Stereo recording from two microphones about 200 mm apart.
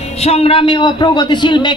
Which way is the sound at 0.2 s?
30° left (ahead or behind).